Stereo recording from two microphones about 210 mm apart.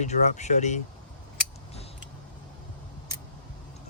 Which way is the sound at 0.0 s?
35° left (ahead or behind).